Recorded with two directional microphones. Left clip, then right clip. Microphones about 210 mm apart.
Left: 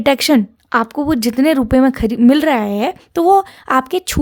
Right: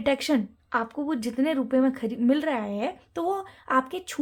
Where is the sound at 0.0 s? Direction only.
50° left (ahead or behind).